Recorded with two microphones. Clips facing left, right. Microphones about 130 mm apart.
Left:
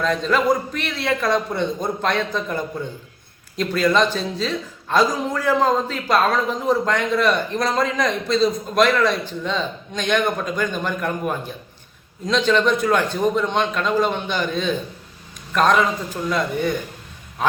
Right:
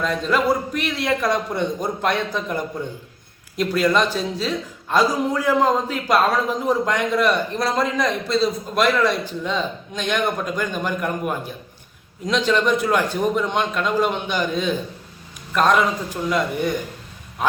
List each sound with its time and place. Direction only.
0.0 s a man's voice: 10° right (ahead or behind)